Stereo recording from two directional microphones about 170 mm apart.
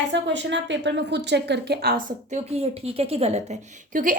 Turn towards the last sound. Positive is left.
turn(degrees=-50)  # may be behind; listen again after turning